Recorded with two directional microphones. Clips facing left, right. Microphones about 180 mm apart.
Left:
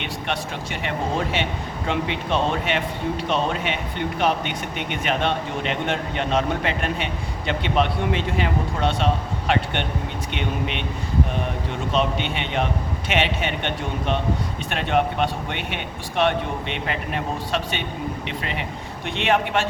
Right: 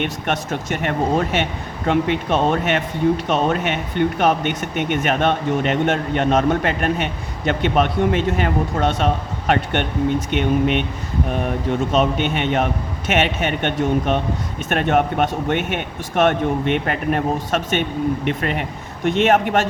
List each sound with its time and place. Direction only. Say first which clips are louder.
0.0 s a man's voice: right 5 dB; 50° right (ahead or behind)
11.9 s a man's voice: right 2 dB; 50° right (ahead or behind)